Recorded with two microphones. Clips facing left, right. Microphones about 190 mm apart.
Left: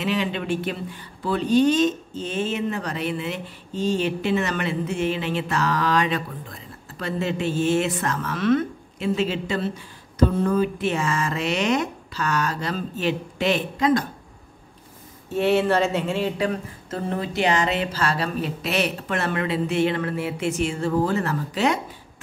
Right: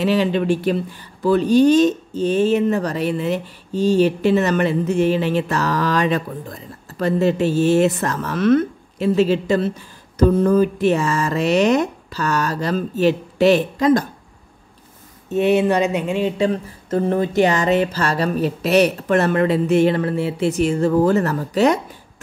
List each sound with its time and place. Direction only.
0.0 s speech: 35° right (ahead or behind)
15.2 s speech: 20° right (ahead or behind)
16.9 s speech: 45° right (ahead or behind)